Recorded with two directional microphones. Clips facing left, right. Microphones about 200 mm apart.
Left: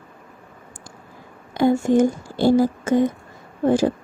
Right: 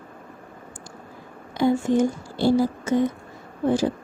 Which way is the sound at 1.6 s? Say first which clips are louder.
Left 3 dB; 50° left (ahead or behind).